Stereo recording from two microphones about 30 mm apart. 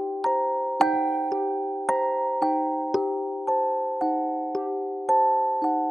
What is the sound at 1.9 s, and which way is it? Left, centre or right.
Music, centre.